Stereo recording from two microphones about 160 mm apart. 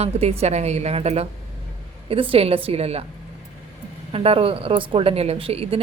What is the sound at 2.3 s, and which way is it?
Speech, 40° right (ahead or behind).